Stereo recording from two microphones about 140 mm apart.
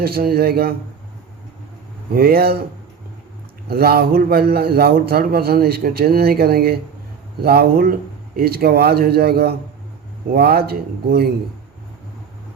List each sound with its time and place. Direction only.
0.0 s a man's voice: 90° right
2.1 s a man's voice: 90° right
3.8 s a man's voice: 90° right